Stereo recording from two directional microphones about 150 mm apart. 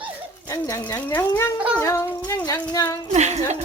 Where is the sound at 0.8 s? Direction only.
15° left (ahead or behind).